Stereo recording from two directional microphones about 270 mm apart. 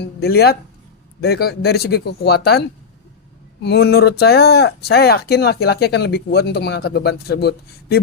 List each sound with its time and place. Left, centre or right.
0.0 s speech: left